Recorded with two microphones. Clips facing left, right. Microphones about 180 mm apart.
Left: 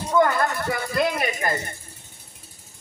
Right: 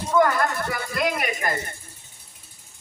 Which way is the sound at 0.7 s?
30° left (ahead or behind).